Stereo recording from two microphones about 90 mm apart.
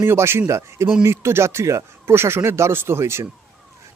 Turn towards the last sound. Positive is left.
turn(degrees=-30)  # may be behind; listen again after turning